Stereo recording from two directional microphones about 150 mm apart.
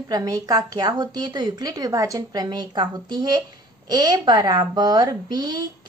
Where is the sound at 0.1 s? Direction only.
25° right (ahead or behind).